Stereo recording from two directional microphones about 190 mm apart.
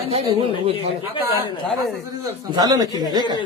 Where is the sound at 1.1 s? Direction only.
25° left (ahead or behind).